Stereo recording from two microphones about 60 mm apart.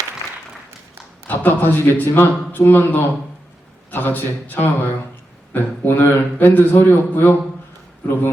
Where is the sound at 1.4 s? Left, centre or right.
Left.